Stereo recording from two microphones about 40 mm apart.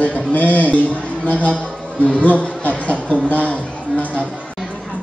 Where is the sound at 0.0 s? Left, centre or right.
Left.